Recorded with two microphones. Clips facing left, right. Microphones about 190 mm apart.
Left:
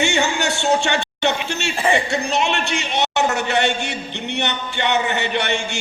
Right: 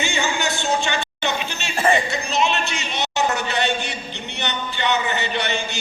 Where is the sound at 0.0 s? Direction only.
70° left (ahead or behind).